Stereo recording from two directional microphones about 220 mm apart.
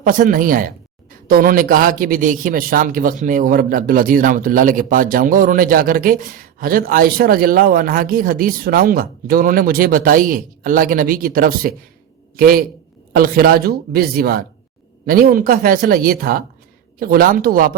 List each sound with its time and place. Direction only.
0.0 s a man's voice: 35° right (ahead or behind)